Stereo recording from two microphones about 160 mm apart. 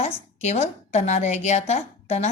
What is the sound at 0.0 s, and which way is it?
A woman's voice, 45° left (ahead or behind).